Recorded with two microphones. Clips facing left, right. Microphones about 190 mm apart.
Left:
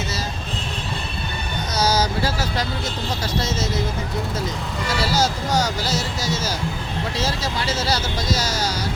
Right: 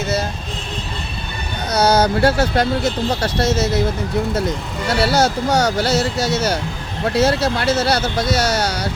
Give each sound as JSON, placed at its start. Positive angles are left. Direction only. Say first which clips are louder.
{"t": 1.7, "sound": "speech", "louder": "right 6 dB", "side_deg": -60}
{"t": 4.9, "sound": "speech", "louder": "right 6 dB", "side_deg": -65}